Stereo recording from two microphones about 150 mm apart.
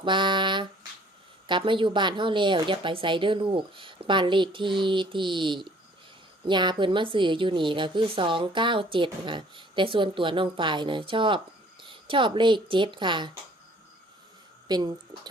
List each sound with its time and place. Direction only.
0.0 s a woman's voice: 30° right (ahead or behind)
14.7 s speech: 25° right (ahead or behind)